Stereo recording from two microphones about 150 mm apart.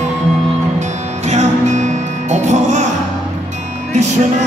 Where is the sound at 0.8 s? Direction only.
50° right (ahead or behind).